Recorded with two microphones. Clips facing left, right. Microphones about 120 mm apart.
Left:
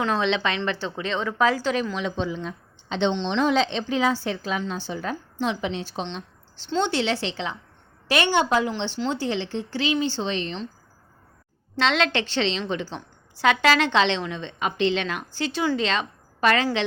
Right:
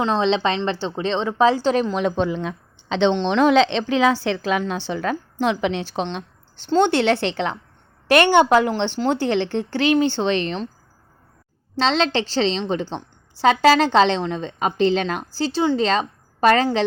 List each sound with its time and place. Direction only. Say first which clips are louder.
0.0 s a woman's voice: right 4 dB; 30° right (ahead or behind); by 3.2 s 85° right
3.2 s a woman's voice: right 7 dB; 65° right (ahead or behind)
11.8 s a woman's voice: right 3 dB; 30° right (ahead or behind)